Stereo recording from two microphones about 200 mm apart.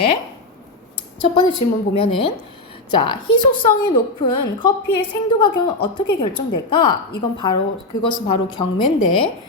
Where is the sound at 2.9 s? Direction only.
25° left (ahead or behind).